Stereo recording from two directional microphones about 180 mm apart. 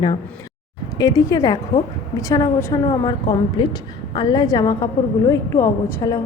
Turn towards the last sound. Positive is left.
turn(degrees=20)  # may be behind; listen again after turning